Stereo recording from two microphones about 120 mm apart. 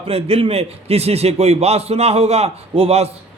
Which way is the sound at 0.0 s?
55° right (ahead or behind).